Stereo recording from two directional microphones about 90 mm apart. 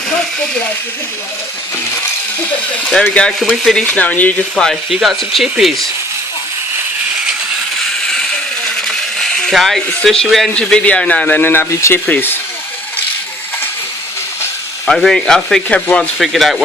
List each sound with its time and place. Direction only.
3.4 s rub: centre (ahead or behind)
3.8 s speech: 15° left (ahead or behind)
4.5 s rub: 5° left (ahead or behind)
9.1 s speech: centre (ahead or behind)
10.2 s rub: centre (ahead or behind)
10.5 s speech: 10° left (ahead or behind); by 11.9 s 30° left (ahead or behind)
12.0 s speech: 20° left (ahead or behind)
14.8 s rub: 5° left (ahead or behind)
16.1 s rub: centre (ahead or behind)